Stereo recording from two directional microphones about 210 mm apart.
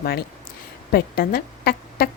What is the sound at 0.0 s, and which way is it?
A woman's voice, 45° left (ahead or behind).